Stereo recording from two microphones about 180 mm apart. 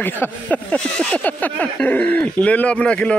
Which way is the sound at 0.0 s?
10° left (ahead or behind).